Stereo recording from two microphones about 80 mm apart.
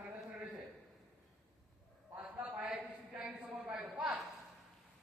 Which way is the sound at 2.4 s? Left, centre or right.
Centre.